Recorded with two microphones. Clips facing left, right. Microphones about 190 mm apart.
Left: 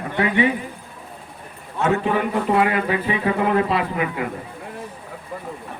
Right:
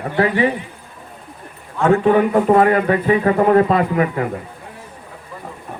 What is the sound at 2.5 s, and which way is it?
A man's voice, 45° right (ahead or behind).